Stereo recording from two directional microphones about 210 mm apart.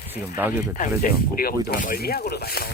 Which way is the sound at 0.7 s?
40° left (ahead or behind).